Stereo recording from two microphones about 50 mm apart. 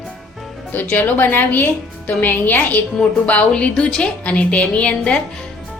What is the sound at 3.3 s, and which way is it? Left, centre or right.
A woman's voice, left.